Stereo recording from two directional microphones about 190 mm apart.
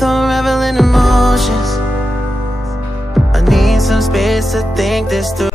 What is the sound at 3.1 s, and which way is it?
Music, centre (ahead or behind).